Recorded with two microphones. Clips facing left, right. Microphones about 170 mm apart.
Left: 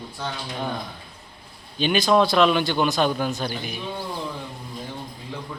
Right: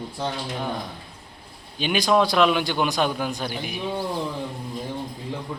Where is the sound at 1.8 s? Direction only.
10° right (ahead or behind).